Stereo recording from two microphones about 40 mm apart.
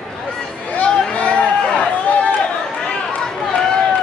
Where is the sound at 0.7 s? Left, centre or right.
Left.